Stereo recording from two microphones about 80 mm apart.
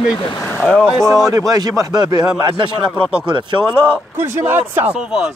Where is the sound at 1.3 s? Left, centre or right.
Right.